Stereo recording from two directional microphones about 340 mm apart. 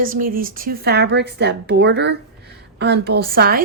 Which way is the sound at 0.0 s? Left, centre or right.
Right.